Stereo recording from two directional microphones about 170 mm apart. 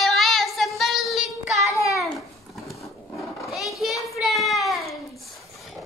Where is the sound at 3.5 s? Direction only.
Centre (ahead or behind).